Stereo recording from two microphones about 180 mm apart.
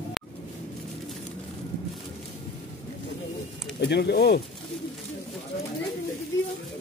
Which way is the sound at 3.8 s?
70° left (ahead or behind).